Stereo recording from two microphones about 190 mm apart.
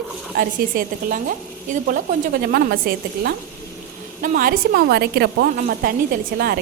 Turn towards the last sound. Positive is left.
turn(degrees=-55)  # may be behind; listen again after turning